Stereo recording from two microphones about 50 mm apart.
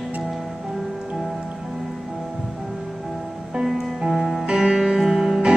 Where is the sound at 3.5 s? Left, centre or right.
Centre.